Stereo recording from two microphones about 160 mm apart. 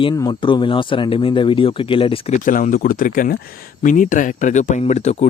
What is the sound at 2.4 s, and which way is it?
Speech, 55° left (ahead or behind).